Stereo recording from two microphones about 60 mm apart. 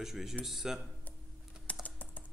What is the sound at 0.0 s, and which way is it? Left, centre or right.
Speech, centre.